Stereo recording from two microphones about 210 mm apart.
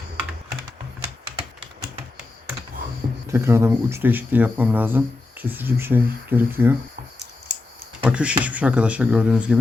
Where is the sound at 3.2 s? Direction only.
15° right (ahead or behind).